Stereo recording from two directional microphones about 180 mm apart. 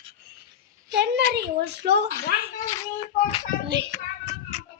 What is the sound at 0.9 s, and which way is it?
Speech, 70° right (ahead or behind).